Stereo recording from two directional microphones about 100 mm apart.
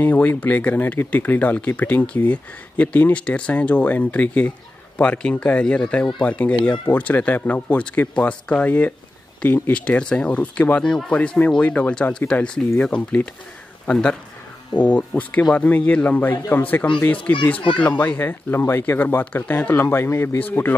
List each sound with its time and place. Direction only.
0.0 s speech: 15° left (ahead or behind)